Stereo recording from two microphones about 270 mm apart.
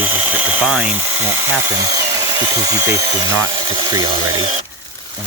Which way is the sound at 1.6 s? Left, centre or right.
Centre.